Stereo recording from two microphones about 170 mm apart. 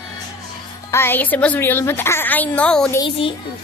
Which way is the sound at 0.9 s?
15° left (ahead or behind).